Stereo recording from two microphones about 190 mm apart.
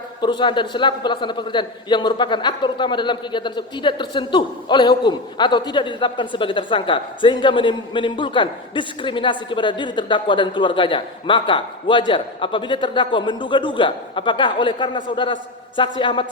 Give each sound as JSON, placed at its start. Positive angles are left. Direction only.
{"t": 0.2, "sound": "a man's voice", "side_deg": 25}